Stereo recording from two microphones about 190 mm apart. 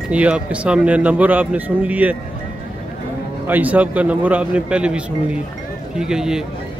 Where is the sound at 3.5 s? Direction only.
10° right (ahead or behind).